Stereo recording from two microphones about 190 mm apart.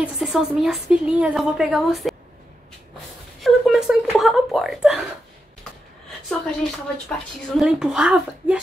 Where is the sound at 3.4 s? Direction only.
Centre (ahead or behind).